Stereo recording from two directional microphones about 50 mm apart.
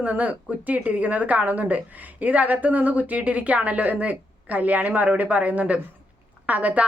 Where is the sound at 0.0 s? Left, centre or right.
Right.